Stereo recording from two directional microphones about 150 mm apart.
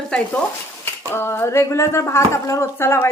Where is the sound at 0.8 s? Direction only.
15° left (ahead or behind).